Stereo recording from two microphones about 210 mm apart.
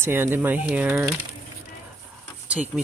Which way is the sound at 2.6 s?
Centre (ahead or behind).